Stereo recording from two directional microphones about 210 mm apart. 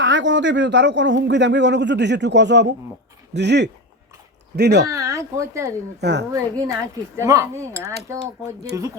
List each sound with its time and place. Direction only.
0.0 s a man's voice: 60° right (ahead or behind)
4.9 s speech: 15° right (ahead or behind)
6.0 s a man's voice: 55° right (ahead or behind)
6.3 s speech: 15° right (ahead or behind)